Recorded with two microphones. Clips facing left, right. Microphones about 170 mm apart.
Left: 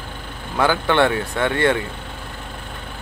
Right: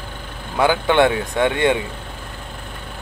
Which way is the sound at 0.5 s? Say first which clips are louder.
Right 2 dB; 15° right (ahead or behind).